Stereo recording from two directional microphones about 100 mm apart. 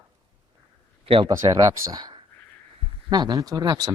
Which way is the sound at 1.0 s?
60° right (ahead or behind).